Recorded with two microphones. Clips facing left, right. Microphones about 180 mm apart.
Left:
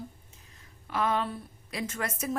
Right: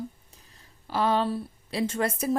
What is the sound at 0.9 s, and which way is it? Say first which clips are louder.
A woman's voice: right 4 dB; 30° right (ahead or behind).